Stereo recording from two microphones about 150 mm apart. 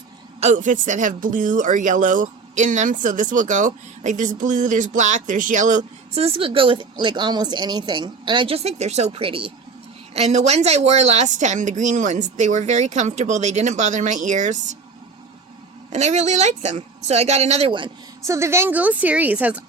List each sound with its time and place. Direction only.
0.5 s speech: 60° right (ahead or behind)
6.2 s a woman's voice: 40° right (ahead or behind)
15.9 s a woman's voice: 50° right (ahead or behind)
17.7 s speech: 35° right (ahead or behind)
18.3 s a woman's voice: 20° right (ahead or behind)